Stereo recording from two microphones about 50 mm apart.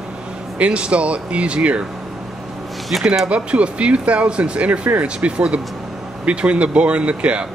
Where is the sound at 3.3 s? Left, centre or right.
Right.